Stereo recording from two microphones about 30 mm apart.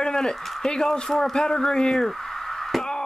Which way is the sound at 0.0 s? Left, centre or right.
Left.